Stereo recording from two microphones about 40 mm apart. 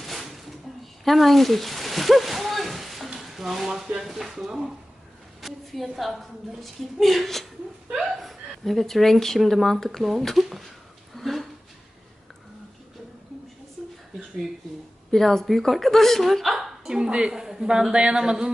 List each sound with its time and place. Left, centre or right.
0.0 s a sound: centre
4.0 s a woman's voice: centre
11.1 s a sound: centre
15.1 s a woman's voice: centre
16.9 s a woman's voice: right
17.3 s a man's voice: centre
17.9 s a woman's voice: right